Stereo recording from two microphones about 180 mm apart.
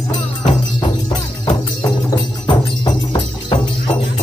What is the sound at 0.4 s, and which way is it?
Music, 25° left (ahead or behind).